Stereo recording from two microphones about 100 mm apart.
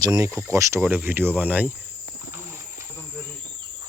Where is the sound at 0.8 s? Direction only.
20° right (ahead or behind).